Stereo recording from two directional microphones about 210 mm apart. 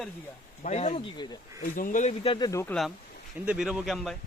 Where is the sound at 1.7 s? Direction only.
40° left (ahead or behind); by 2.7 s 15° left (ahead or behind).